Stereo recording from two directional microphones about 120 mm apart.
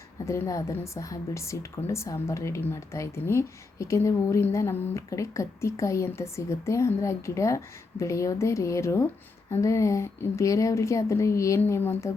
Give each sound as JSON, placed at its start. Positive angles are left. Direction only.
{"t": 0.3, "sound": "a woman's voice", "side_deg": 25}